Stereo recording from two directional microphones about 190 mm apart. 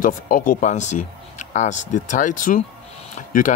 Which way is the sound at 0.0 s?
45° left (ahead or behind).